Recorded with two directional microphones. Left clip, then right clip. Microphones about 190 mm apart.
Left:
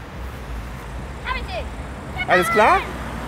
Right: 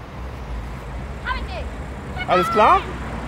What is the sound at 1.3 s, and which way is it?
Vehicle, 30° left (ahead or behind).